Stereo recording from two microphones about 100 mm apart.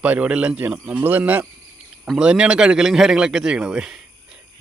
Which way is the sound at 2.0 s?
5° right (ahead or behind).